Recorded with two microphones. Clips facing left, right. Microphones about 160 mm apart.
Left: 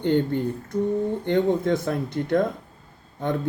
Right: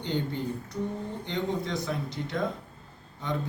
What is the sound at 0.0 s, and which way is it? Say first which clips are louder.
Speech: left 9 dB; 55° left (ahead or behind).